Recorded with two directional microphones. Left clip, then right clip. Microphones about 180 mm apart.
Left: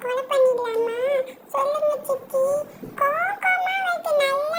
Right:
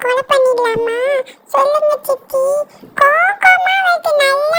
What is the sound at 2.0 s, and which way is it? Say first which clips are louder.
Child singing: right 7 dB; 75° right (ahead or behind).